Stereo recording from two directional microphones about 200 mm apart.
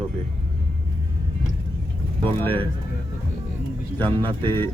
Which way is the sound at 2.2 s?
10° left (ahead or behind).